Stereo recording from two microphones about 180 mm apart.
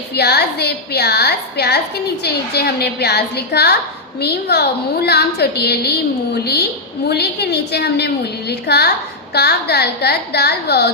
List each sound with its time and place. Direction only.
0.1 s a woman's voice: 65° left (ahead or behind)